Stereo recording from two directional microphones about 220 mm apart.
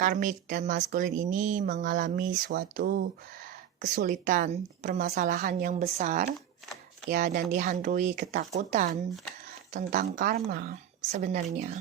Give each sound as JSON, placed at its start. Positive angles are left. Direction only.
{"t": 0.0, "sound": "speech", "side_deg": -40}
{"t": 5.8, "sound": "speech", "side_deg": -30}
{"t": 7.1, "sound": "a woman's voice", "side_deg": -45}